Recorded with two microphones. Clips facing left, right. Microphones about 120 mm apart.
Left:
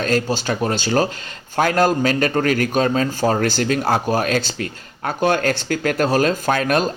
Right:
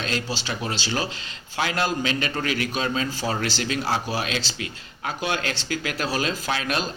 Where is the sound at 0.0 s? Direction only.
45° left (ahead or behind).